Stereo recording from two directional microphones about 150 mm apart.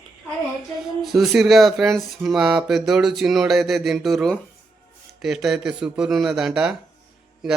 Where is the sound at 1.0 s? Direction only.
Centre (ahead or behind).